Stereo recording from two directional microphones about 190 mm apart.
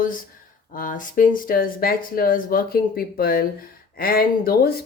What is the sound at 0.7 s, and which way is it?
Speech, 45° left (ahead or behind).